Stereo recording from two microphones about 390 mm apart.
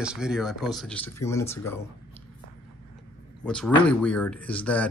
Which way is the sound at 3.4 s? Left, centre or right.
Centre.